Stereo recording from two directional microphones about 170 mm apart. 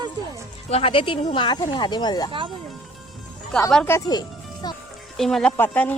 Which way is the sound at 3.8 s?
20° left (ahead or behind).